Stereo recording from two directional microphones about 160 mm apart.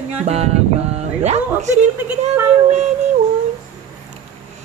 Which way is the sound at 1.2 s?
45° right (ahead or behind).